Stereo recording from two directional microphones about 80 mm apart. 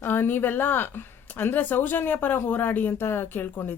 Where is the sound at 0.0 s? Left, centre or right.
Left.